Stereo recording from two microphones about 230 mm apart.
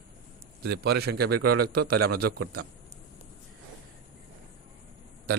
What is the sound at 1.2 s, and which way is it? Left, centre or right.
A man's voice, right.